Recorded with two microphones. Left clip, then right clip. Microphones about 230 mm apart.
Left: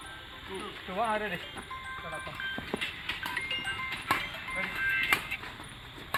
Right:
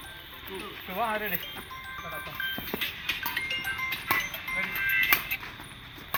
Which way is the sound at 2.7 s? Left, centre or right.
Right.